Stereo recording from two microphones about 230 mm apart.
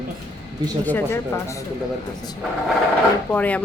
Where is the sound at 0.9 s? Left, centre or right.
Centre.